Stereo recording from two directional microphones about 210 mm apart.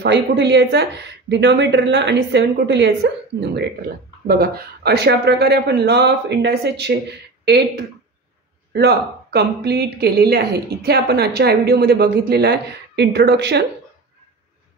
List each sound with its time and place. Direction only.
0.0 s speech: 55° right (ahead or behind)
8.7 s speech: 50° right (ahead or behind)